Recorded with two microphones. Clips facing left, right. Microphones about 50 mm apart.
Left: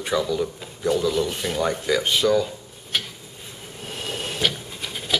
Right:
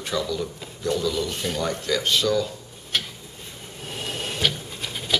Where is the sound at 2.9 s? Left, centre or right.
Centre.